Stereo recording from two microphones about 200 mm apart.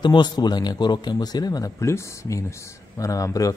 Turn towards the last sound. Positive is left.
turn(degrees=15)  # may be behind; listen again after turning